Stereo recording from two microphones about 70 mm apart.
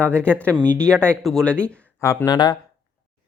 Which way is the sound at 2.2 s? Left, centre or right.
Left.